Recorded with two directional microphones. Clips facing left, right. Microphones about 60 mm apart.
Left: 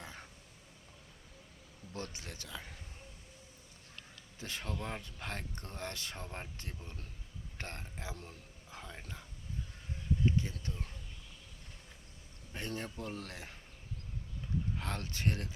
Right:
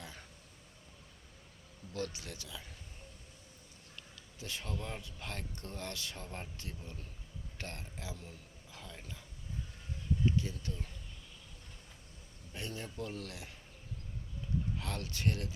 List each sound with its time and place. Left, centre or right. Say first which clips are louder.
0.0 s a sound: left 1 dB; left
1.9 s speech: right 4 dB; left
3.9 s speech: even; left
10.2 s speech: even; left
12.5 s speech: left 1 dB; left
14.8 s speech: left 1 dB; left